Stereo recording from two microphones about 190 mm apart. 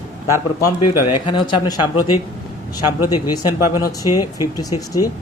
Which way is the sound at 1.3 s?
25° left (ahead or behind).